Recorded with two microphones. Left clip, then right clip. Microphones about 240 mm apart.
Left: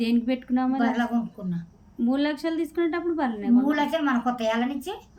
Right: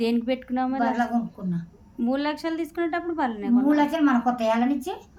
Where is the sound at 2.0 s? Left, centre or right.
Centre.